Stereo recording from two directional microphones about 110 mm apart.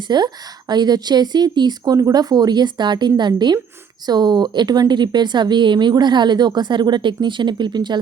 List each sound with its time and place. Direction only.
0.1 s speech: 40° right (ahead or behind)